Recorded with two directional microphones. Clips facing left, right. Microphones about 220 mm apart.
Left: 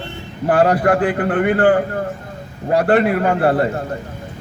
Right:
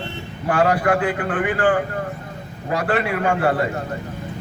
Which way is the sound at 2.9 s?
45° left (ahead or behind).